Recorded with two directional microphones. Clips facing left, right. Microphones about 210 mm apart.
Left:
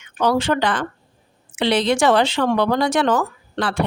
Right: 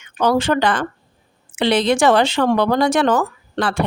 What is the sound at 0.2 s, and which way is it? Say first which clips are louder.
Speech: right 2 dB; 45° right (ahead or behind).